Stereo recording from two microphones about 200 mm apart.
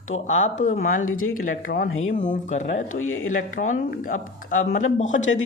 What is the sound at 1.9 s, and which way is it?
Speech, 90° left.